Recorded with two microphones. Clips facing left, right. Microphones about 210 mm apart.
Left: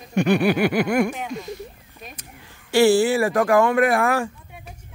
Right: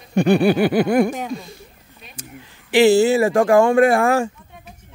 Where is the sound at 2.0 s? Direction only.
45° left (ahead or behind).